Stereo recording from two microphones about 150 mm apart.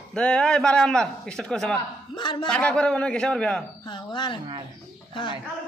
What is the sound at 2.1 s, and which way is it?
Speech, 30° left (ahead or behind).